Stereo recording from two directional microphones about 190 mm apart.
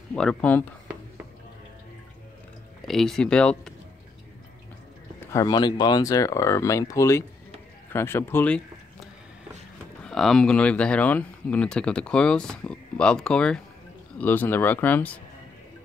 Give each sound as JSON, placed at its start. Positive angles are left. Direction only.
{"t": 0.1, "sound": "speech", "side_deg": 5}
{"t": 2.9, "sound": "speech", "side_deg": 0}
{"t": 5.3, "sound": "speech", "side_deg": 20}
{"t": 10.0, "sound": "speech", "side_deg": 0}